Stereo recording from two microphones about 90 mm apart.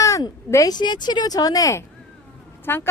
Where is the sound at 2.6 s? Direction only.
25° left (ahead or behind).